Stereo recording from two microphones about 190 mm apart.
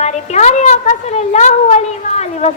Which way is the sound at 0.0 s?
35° left (ahead or behind).